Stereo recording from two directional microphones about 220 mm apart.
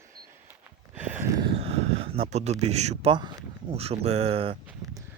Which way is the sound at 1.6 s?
25° right (ahead or behind).